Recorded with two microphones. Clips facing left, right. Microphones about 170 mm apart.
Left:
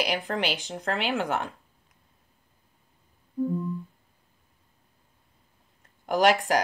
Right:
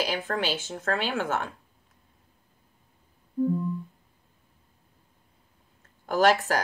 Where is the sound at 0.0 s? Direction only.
15° left (ahead or behind).